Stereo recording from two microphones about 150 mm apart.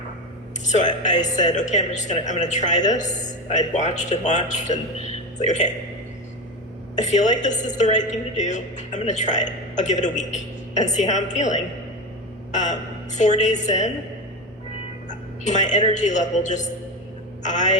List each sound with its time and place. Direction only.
0.6 s speech: 55° left (ahead or behind)
6.9 s speech: 50° left (ahead or behind)
15.4 s speech: 50° left (ahead or behind)